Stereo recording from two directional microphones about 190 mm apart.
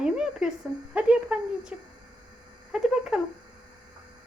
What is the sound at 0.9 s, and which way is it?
Speech, 5° right (ahead or behind).